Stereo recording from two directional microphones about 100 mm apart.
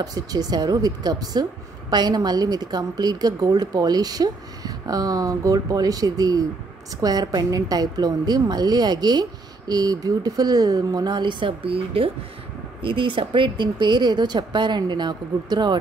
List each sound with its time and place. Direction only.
0.0 s speech: 40° right (ahead or behind)